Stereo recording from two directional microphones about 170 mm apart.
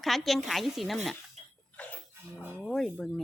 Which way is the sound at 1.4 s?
40° right (ahead or behind).